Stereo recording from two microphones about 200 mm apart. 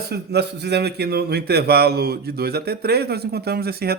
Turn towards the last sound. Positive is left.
turn(degrees=-50)  # may be behind; listen again after turning